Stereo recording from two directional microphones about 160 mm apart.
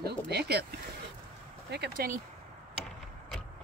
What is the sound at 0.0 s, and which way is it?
Speech, 90° right.